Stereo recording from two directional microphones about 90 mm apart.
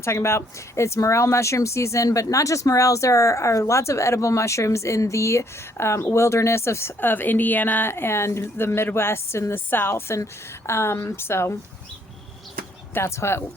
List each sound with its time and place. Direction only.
0.0 s speech: 30° left (ahead or behind)
12.9 s speech: 30° left (ahead or behind)